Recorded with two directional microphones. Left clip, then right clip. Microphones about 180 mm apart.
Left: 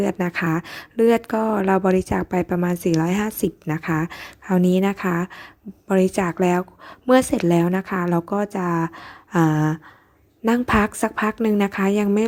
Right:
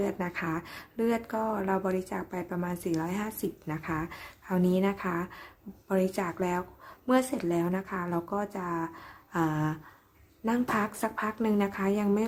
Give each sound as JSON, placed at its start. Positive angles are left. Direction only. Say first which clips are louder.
{"t": 0.0, "sound": "a woman's voice", "louder": "left 9 dB", "side_deg": 40}